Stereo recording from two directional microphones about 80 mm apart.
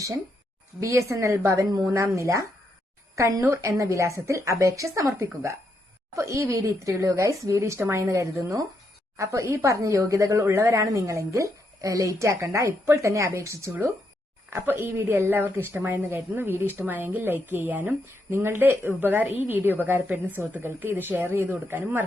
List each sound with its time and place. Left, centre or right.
0.8 s a woman's voice: right
14.5 s a woman's voice: right